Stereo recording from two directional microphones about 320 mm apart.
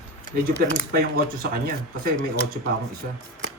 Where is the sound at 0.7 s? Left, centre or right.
Right.